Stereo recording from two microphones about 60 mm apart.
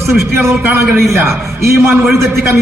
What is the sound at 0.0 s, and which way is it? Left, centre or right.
A man's voice, right.